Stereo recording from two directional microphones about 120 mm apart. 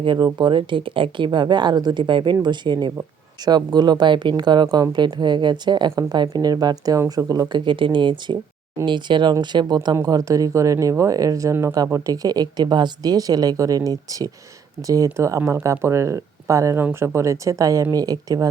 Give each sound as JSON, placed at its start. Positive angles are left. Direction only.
{"t": 0.0, "sound": "a woman's voice", "side_deg": -40}